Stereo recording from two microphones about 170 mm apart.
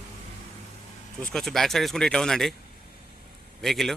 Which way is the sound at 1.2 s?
5° left (ahead or behind).